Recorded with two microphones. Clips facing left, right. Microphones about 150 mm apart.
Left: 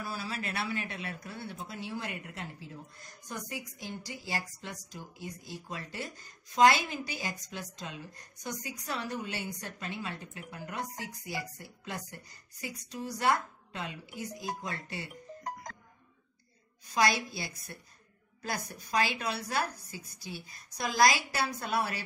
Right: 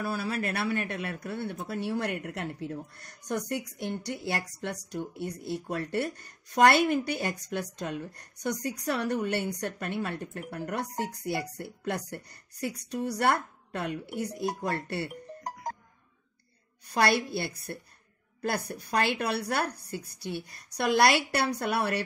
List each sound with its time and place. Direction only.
0.0 s a woman's voice: 55° right (ahead or behind)
16.9 s a woman's voice: 60° right (ahead or behind)